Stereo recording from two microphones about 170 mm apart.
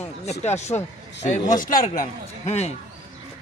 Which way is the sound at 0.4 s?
40° left (ahead or behind).